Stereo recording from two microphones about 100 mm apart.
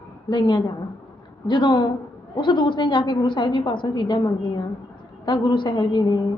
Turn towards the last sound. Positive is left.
turn(degrees=50)  # may be behind; listen again after turning